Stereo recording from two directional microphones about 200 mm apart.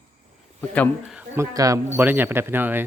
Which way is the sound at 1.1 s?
5° right (ahead or behind).